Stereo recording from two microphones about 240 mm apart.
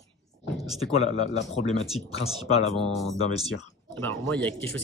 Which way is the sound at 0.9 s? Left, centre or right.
Left.